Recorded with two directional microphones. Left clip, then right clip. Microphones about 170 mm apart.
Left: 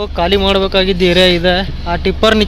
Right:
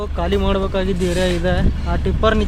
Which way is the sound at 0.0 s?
15° left (ahead or behind).